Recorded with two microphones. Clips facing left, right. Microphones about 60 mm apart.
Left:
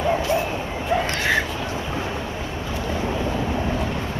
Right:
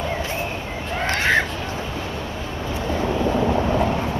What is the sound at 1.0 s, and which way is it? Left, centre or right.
Crow, right.